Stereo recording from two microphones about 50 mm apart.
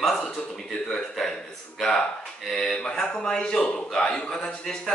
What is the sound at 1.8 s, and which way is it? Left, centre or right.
A man's voice, centre.